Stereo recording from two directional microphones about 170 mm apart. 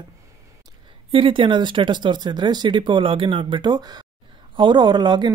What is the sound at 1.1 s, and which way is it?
Speech, 30° right (ahead or behind).